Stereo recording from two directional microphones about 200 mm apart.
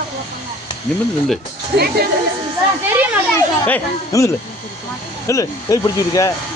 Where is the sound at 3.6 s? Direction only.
10° left (ahead or behind).